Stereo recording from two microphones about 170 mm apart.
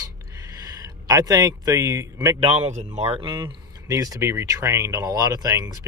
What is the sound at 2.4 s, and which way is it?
Speech, 35° right (ahead or behind).